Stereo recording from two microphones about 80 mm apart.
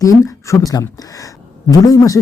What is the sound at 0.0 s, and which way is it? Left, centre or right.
Speech, left.